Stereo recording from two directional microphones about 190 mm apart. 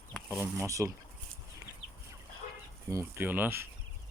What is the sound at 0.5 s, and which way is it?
Speech, 15° right (ahead or behind).